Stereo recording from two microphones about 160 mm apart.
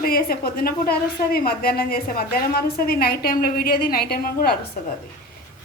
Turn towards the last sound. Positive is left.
turn(degrees=65)  # may be behind; listen again after turning